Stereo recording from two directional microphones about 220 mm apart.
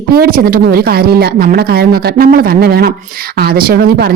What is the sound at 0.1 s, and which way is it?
Speech, 40° right (ahead or behind).